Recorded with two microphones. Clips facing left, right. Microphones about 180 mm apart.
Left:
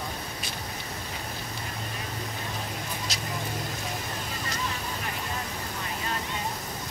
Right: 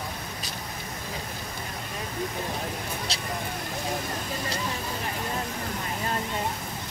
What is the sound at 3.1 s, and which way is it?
Vehicle, 30° right (ahead or behind).